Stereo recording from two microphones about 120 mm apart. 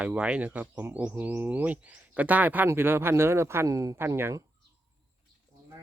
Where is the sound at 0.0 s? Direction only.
10° right (ahead or behind).